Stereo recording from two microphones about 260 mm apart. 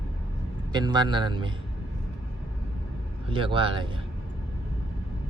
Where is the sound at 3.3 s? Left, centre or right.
Centre.